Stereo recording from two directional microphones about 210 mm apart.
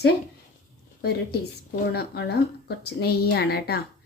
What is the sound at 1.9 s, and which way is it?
Speech, 50° left (ahead or behind).